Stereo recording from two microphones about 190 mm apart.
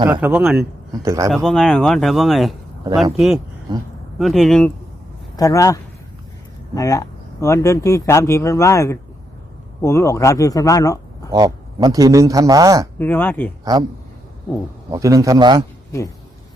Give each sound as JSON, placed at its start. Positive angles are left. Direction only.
{"t": 0.1, "sound": "a man's voice", "side_deg": -10}
{"t": 1.0, "sound": "a man's voice", "side_deg": -15}
{"t": 1.3, "sound": "speech", "side_deg": 0}
{"t": 3.7, "sound": "a man's voice", "side_deg": -20}
{"t": 4.2, "sound": "speech", "side_deg": 0}
{"t": 5.4, "sound": "speech", "side_deg": 15}
{"t": 11.3, "sound": "a man's voice", "side_deg": -20}
{"t": 13.0, "sound": "speech", "side_deg": 10}
{"t": 14.8, "sound": "a man's voice", "side_deg": -15}